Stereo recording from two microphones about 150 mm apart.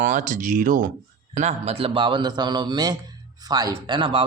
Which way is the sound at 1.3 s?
50° right (ahead or behind).